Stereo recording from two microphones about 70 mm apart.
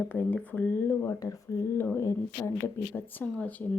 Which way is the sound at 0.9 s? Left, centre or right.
Left.